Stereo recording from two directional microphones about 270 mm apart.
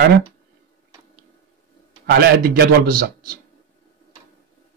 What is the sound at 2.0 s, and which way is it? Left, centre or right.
Speech, right.